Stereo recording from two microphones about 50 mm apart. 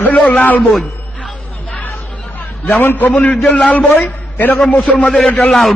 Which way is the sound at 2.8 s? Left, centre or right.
Left.